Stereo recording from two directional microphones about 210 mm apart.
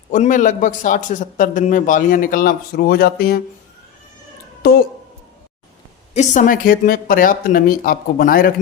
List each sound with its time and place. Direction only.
0.1 s a man's voice: 35° left (ahead or behind)
4.6 s a woman's voice: 45° left (ahead or behind)
6.1 s a man's voice: 40° left (ahead or behind)